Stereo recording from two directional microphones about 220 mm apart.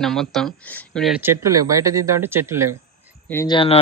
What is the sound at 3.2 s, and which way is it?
Speech, 10° left (ahead or behind).